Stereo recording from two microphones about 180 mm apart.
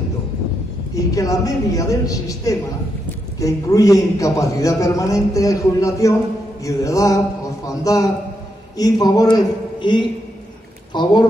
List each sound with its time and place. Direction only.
0.9 s a man's voice: 20° left (ahead or behind)
6.6 s mantra: 15° left (ahead or behind)
7.6 s a man's voice: 20° left (ahead or behind)